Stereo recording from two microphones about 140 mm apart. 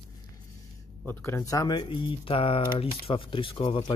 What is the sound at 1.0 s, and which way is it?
Speech, 20° left (ahead or behind).